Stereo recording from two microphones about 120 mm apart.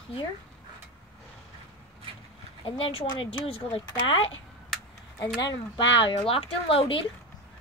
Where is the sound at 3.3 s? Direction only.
55° left (ahead or behind).